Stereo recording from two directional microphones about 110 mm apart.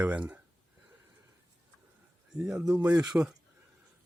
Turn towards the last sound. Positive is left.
turn(degrees=-5)  # may be behind; listen again after turning